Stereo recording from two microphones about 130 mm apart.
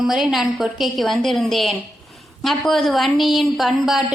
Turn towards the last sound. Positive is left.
turn(degrees=0)  # may be behind; listen again after turning